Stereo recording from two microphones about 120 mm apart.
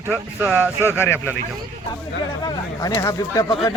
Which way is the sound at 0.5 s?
15° right (ahead or behind).